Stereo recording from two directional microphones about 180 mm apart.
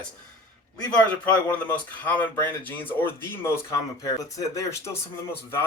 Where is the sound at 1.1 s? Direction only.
10° left (ahead or behind).